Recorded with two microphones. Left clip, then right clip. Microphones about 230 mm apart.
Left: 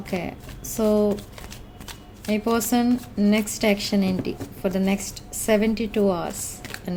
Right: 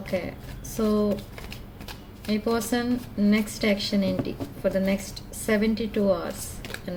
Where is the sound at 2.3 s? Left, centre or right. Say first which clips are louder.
Left 3 dB; left.